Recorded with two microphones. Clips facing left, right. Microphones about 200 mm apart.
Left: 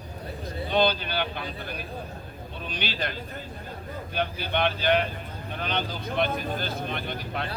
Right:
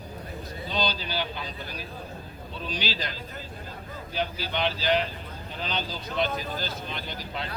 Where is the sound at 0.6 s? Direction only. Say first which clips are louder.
Left 6 dB; 60° left (ahead or behind).